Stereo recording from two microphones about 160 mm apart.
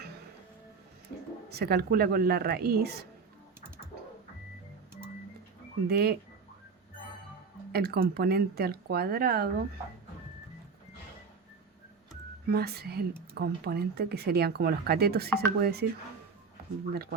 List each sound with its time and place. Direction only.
1.5 s speech: 80° right
5.9 s speech: 80° right
7.7 s speech: 70° right (ahead or behind)
12.5 s speech: 75° right (ahead or behind)
16.9 s speech: 75° right (ahead or behind)